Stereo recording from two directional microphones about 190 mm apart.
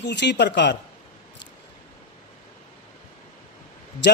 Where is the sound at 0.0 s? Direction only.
65° left (ahead or behind).